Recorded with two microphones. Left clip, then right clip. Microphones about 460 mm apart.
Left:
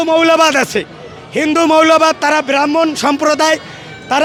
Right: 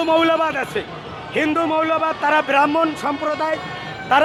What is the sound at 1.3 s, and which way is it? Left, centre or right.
A man's voice, left.